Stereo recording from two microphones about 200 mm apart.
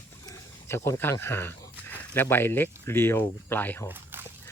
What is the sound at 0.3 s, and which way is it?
Speech, 15° left (ahead or behind).